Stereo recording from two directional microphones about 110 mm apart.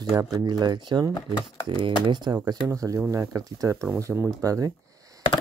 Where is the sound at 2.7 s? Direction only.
30° right (ahead or behind).